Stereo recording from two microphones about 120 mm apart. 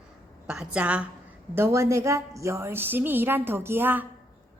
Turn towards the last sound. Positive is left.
turn(degrees=-15)  # may be behind; listen again after turning